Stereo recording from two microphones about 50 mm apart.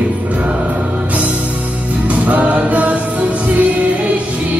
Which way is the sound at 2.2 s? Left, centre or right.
Right.